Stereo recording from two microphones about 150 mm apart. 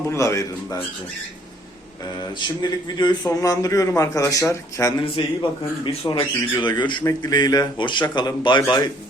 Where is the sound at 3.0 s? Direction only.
30° left (ahead or behind).